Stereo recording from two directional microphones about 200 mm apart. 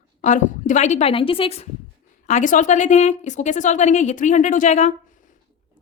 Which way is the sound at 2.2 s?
40° left (ahead or behind).